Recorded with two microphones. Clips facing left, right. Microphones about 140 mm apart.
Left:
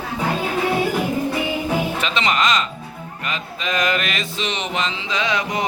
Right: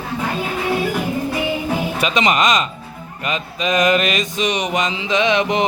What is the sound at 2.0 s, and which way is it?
Speech, 15° right (ahead or behind).